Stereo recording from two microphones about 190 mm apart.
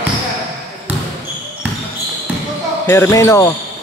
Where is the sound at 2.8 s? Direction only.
15° left (ahead or behind).